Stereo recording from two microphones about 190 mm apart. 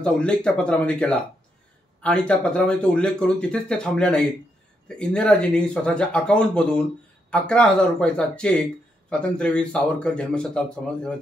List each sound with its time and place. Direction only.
0.0 s speech: 5° left (ahead or behind)